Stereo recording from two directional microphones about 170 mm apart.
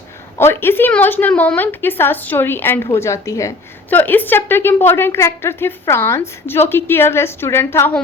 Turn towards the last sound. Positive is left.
turn(degrees=15)  # may be behind; listen again after turning